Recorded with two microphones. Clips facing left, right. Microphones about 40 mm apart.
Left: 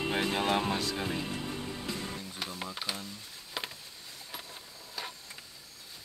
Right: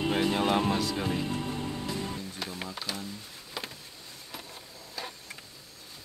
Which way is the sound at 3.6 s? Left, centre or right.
Centre.